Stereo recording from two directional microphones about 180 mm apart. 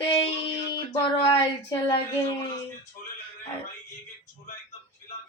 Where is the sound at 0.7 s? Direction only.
25° left (ahead or behind).